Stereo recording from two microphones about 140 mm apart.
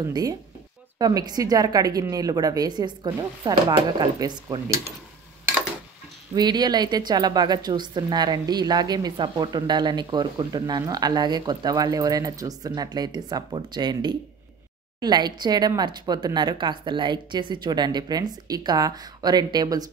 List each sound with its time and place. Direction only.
0.1 s a woman's voice: 25° right (ahead or behind)
6.3 s a woman's voice: 30° right (ahead or behind)